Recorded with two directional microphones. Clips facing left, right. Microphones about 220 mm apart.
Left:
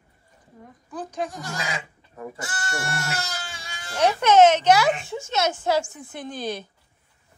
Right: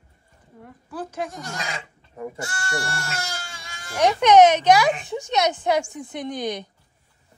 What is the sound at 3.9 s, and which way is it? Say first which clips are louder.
Speech: right 2 dB; 15° right (ahead or behind).